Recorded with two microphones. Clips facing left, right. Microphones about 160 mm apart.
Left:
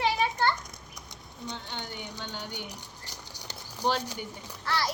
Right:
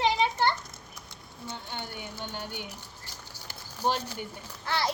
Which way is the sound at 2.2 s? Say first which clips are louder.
Right 3 dB; 15° right (ahead or behind).